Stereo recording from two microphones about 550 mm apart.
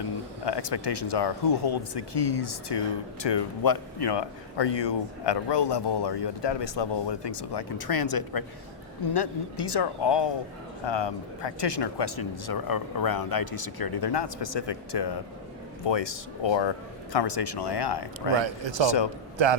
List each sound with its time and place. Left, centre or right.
0.4 s speech: left
18.3 s speech: right
18.9 s speech: left
19.4 s speech: right